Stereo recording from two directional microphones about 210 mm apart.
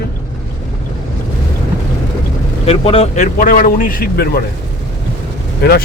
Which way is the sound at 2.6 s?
30° left (ahead or behind).